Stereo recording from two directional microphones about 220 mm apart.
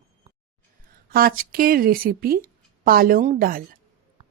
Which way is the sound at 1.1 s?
40° right (ahead or behind).